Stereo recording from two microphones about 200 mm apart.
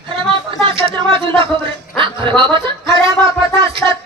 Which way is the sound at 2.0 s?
25° right (ahead or behind).